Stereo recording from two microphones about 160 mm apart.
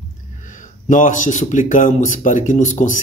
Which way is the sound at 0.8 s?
55° left (ahead or behind).